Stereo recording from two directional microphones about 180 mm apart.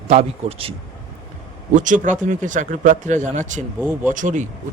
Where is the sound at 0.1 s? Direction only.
35° right (ahead or behind).